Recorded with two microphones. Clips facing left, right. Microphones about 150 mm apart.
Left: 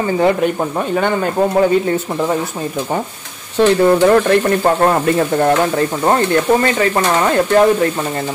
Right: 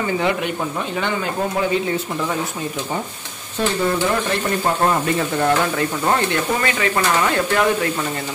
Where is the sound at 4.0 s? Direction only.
60° left (ahead or behind).